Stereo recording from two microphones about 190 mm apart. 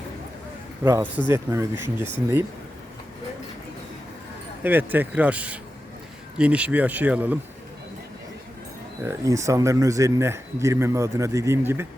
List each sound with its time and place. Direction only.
0.9 s a man's voice: 15° right (ahead or behind)
4.6 s a man's voice: 10° right (ahead or behind)
9.0 s a man's voice: 15° right (ahead or behind)